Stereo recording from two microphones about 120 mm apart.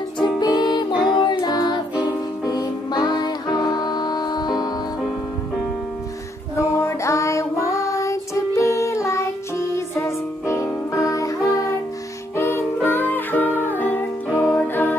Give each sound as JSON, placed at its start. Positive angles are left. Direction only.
{"t": 0.4, "sound": "music", "side_deg": 35}
{"t": 6.5, "sound": "child singing", "side_deg": 25}
{"t": 12.4, "sound": "music", "side_deg": 20}